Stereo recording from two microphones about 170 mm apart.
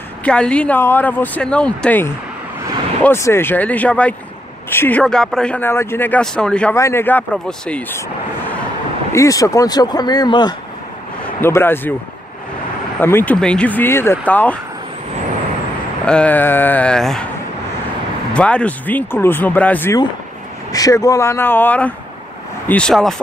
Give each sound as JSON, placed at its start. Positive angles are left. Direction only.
{"t": 0.2, "sound": "speech", "side_deg": 5}
{"t": 6.7, "sound": "speech", "side_deg": 15}
{"t": 9.1, "sound": "speech", "side_deg": 20}
{"t": 11.4, "sound": "speech", "side_deg": 15}
{"t": 13.0, "sound": "speech", "side_deg": 10}
{"t": 16.1, "sound": "speech", "side_deg": 10}
{"t": 18.3, "sound": "speech", "side_deg": 5}